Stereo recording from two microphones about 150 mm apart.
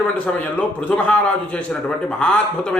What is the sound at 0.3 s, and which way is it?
A man's voice, 10° left (ahead or behind).